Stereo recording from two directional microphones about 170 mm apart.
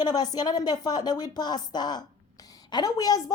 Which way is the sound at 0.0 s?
25° left (ahead or behind).